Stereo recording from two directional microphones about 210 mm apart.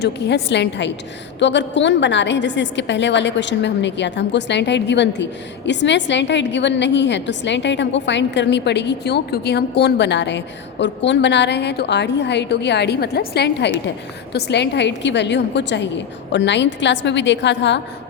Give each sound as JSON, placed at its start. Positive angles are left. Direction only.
{"t": 0.0, "sound": "a woman's voice", "side_deg": 55}